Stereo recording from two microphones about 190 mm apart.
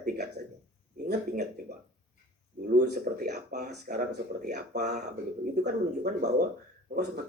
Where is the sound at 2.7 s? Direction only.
50° right (ahead or behind).